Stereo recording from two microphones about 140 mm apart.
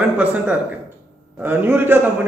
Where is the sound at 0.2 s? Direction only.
10° right (ahead or behind).